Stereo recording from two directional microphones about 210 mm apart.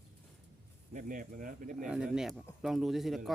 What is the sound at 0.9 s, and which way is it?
Speech, 40° right (ahead or behind).